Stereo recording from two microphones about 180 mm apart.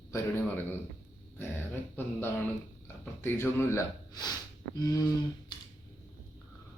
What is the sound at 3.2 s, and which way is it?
Speech, 15° left (ahead or behind).